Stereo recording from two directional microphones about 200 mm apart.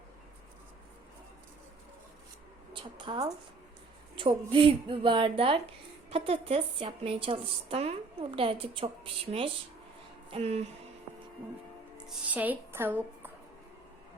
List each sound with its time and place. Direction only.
2.7 s a woman's voice: 25° right (ahead or behind)
11.9 s speech: 5° right (ahead or behind)